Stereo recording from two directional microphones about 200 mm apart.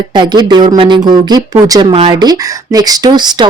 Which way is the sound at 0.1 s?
20° right (ahead or behind).